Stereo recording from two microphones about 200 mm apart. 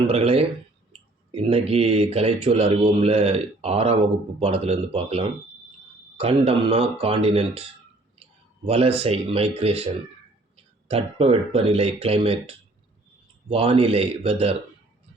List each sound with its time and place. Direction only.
0.1 s speech: 30° right (ahead or behind)
8.6 s speech: 30° right (ahead or behind)